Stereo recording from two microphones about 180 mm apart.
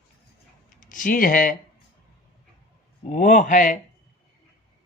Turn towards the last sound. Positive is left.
turn(degrees=45)  # may be behind; listen again after turning